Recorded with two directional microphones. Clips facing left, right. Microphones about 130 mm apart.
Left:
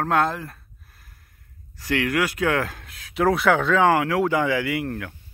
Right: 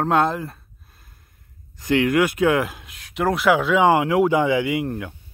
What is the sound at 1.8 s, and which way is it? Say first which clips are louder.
Speech: right 5 dB; 20° right (ahead or behind).